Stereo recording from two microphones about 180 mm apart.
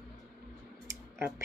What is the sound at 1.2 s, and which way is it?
Speech, 15° right (ahead or behind).